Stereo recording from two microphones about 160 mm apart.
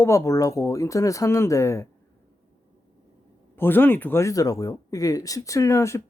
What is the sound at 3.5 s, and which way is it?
Speech, 10° left (ahead or behind).